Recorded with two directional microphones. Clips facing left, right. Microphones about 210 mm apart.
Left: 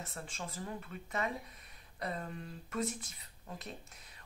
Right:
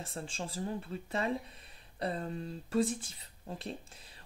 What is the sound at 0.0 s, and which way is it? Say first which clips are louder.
Speech: right 4 dB; 30° right (ahead or behind).